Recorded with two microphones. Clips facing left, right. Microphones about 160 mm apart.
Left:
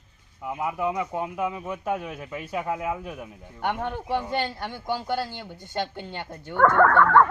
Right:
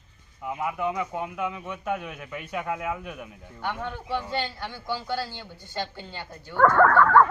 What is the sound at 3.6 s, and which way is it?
A woman's voice, 55° left (ahead or behind).